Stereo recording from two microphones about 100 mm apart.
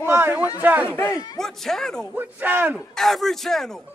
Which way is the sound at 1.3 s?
5° left (ahead or behind).